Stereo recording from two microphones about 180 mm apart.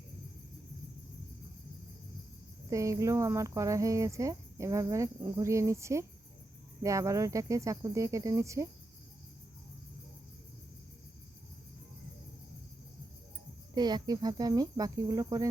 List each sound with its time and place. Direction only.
2.6 s speech: 15° right (ahead or behind)
13.7 s cricket: 25° right (ahead or behind)